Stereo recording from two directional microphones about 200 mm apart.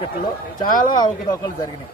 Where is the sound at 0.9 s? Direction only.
20° left (ahead or behind).